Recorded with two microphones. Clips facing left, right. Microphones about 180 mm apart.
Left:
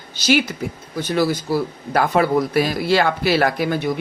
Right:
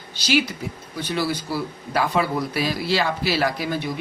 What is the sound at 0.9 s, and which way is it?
Speech, 45° left (ahead or behind).